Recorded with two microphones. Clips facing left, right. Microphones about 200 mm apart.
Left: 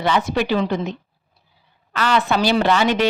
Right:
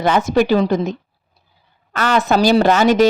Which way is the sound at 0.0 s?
45° right (ahead or behind).